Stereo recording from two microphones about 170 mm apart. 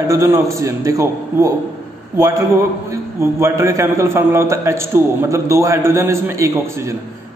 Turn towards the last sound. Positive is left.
turn(degrees=-15)  # may be behind; listen again after turning